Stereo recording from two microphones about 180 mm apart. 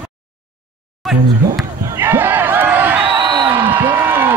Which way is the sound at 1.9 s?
15° right (ahead or behind).